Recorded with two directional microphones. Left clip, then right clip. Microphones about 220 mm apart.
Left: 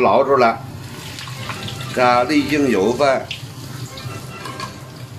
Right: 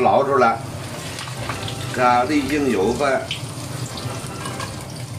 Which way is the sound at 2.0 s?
50° left (ahead or behind).